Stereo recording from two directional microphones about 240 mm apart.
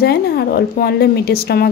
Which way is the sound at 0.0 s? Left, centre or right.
Left.